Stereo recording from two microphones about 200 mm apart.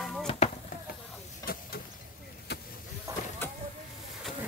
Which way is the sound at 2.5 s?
55° left (ahead or behind).